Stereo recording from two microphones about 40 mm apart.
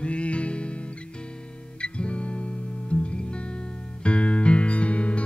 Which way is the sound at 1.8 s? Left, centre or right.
Left.